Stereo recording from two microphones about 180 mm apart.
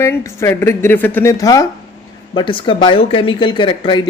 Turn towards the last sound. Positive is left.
turn(degrees=25)  # may be behind; listen again after turning